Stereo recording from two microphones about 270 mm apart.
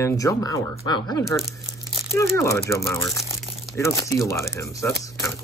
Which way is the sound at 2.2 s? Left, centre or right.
Centre.